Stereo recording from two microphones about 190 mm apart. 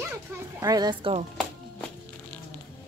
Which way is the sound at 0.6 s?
20° right (ahead or behind).